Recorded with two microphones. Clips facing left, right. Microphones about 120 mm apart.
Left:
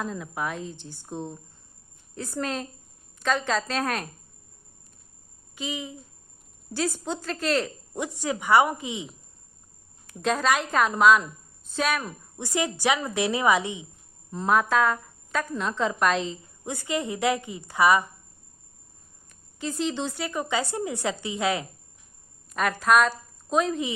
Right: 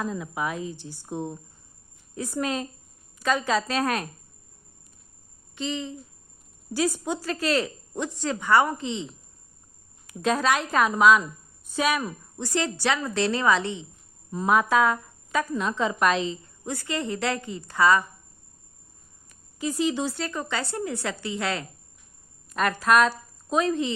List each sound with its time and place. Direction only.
0.0 s a woman's voice: 5° right (ahead or behind)
5.5 s a woman's voice: 10° left (ahead or behind)
6.7 s speech: 10° right (ahead or behind)
7.9 s a woman's voice: 10° left (ahead or behind)
10.1 s a woman's voice: centre (ahead or behind)
12.4 s a woman's voice: 15° left (ahead or behind)
14.3 s a woman's voice: 5° right (ahead or behind)
16.6 s a woman's voice: 15° left (ahead or behind)
19.3 s speech: 5° right (ahead or behind)
20.1 s a woman's voice: 10° left (ahead or behind)
22.4 s a woman's voice: centre (ahead or behind)